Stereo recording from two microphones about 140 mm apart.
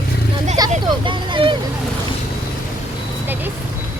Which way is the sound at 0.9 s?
35° right (ahead or behind).